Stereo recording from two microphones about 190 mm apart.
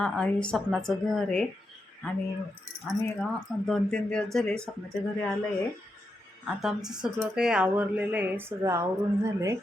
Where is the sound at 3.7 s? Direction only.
5° left (ahead or behind).